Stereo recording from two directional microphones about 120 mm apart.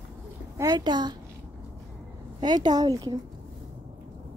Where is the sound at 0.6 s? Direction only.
35° right (ahead or behind).